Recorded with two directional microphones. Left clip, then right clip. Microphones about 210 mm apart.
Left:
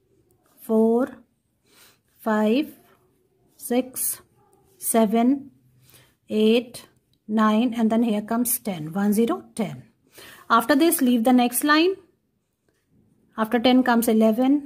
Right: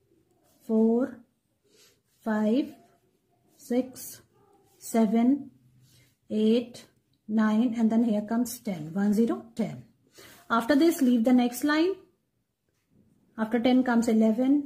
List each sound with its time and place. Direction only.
0.7 s a woman's voice: 40° left (ahead or behind)
2.2 s a woman's voice: 40° left (ahead or behind)
3.6 s a woman's voice: 40° left (ahead or behind)
13.3 s a woman's voice: 40° left (ahead or behind)